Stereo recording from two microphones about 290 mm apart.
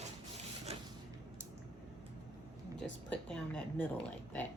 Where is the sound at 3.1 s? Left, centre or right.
Centre.